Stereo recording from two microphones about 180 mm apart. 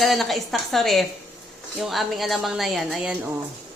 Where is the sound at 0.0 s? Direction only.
Centre (ahead or behind).